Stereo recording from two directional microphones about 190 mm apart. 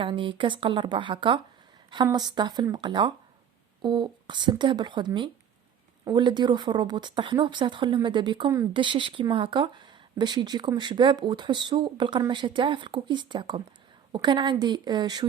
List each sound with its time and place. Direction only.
0.0 s speech: 25° right (ahead or behind)